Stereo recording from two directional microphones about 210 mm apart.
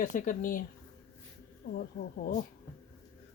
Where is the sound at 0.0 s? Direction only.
40° left (ahead or behind).